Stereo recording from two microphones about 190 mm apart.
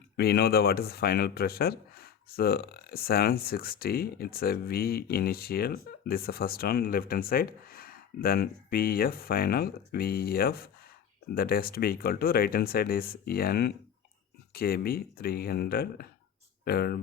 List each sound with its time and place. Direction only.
0.2 s speech: 55° left (ahead or behind)